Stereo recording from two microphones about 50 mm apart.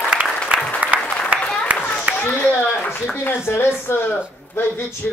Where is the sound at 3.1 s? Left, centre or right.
Left.